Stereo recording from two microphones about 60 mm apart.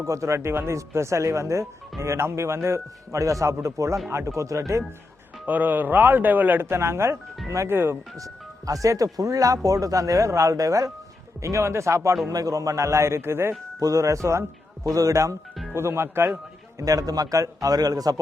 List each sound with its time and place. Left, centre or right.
0.0 s speech: right
5.5 s a man's voice: right
6.7 s speech: right
8.1 s speech: right
12.3 s speech: right
13.7 s speech: right
15.7 s speech: right
16.7 s a man's voice: right